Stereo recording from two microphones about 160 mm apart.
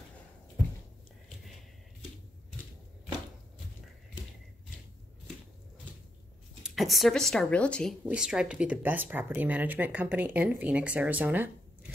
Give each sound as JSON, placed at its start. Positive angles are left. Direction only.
{"t": 6.6, "sound": "speech", "side_deg": 0}
{"t": 8.0, "sound": "speech", "side_deg": -5}